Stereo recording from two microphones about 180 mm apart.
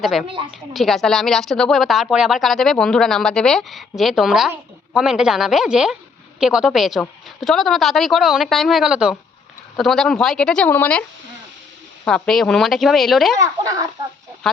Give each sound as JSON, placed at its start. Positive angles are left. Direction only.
{"t": 0.0, "sound": "speech", "side_deg": 0}
{"t": 0.3, "sound": "speech", "side_deg": -30}
{"t": 0.7, "sound": "speech", "side_deg": 0}
{"t": 12.0, "sound": "speech", "side_deg": 5}
{"t": 13.4, "sound": "speech", "side_deg": -20}
{"t": 14.4, "sound": "speech", "side_deg": 0}